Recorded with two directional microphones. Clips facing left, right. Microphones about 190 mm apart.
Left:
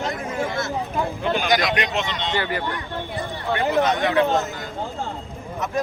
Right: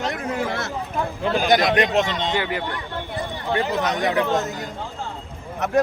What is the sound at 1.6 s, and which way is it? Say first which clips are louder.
Speech: right 5 dB; 50° right (ahead or behind).